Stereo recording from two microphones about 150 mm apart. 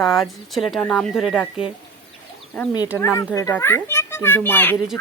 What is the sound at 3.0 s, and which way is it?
A child's voice, 20° left (ahead or behind).